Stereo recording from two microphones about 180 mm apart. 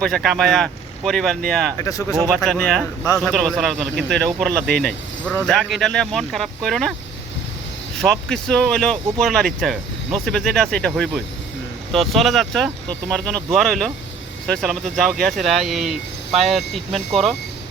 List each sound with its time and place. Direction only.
0.0 s speech: centre (ahead or behind)
1.8 s speech: 20° left (ahead or behind)
2.4 s speech: 5° left (ahead or behind)
7.9 s speech: centre (ahead or behind)